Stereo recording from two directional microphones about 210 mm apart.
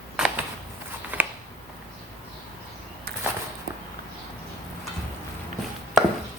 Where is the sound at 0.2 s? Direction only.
5° right (ahead or behind).